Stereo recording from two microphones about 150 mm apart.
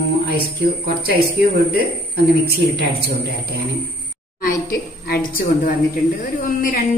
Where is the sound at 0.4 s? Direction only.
90° right.